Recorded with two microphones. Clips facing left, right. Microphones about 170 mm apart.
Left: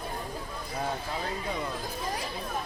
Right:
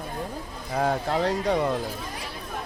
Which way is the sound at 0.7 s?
65° right (ahead or behind).